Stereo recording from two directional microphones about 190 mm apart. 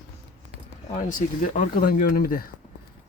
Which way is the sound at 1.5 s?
50° left (ahead or behind).